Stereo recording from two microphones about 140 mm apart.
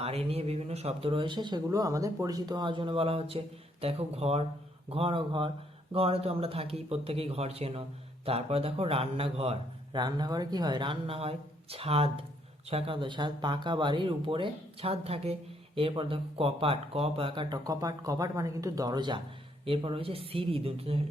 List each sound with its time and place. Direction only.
0.0 s speech: 45° right (ahead or behind)
9.9 s speech: 30° right (ahead or behind)